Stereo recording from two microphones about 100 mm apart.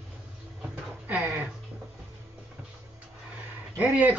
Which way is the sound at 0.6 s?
15° right (ahead or behind).